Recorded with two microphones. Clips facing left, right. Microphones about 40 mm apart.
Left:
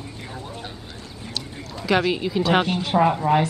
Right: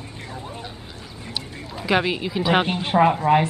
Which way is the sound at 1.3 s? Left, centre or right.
Centre.